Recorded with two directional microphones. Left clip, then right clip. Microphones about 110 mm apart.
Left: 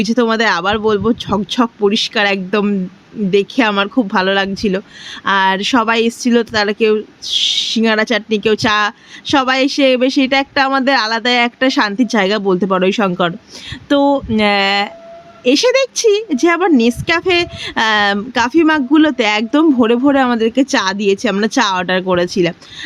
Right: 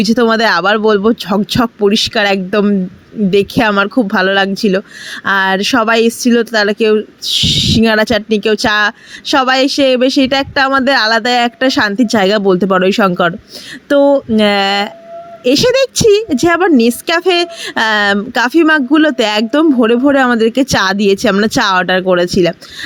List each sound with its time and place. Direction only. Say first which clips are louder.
0.0 s speech: right 3 dB; 40° right (ahead or behind)
13.8 s speech: right 4 dB; 25° right (ahead or behind)
20.6 s speech: right 3 dB; 55° right (ahead or behind); by 22.5 s 35° right (ahead or behind)